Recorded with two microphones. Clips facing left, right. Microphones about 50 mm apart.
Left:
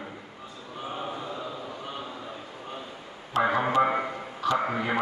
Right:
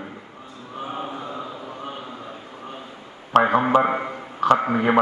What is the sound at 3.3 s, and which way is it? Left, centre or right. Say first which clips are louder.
Speech: right 8 dB; right.